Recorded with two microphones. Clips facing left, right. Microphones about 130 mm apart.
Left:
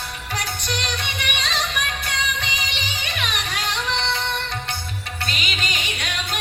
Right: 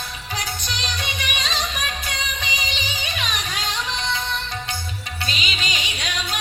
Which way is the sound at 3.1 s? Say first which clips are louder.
Left 2 dB; 60° left (ahead or behind).